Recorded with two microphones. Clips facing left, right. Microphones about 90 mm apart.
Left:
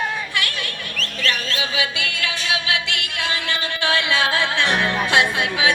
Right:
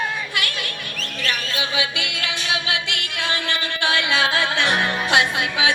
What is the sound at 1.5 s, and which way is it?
Music, 25° right (ahead or behind).